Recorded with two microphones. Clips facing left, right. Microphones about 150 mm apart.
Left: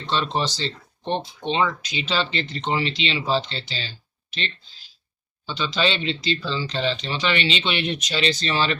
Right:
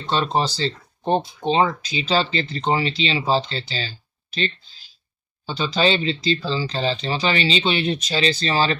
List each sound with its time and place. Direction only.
0.1 s speech: 40° right (ahead or behind)
5.5 s speech: 40° right (ahead or behind)